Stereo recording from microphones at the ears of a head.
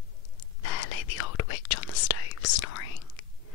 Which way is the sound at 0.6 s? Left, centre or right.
Left.